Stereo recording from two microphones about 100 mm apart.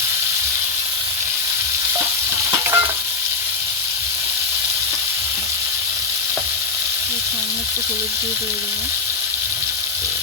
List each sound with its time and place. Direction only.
2.5 s stir: 25° right (ahead or behind)